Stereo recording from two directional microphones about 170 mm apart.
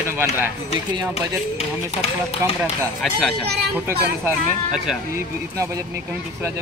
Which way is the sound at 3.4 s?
70° right (ahead or behind).